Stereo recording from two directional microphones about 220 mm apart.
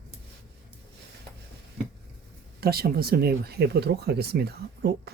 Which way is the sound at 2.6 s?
45° right (ahead or behind).